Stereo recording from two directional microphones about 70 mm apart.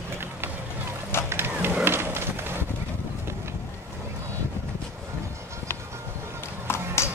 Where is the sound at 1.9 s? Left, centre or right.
Right.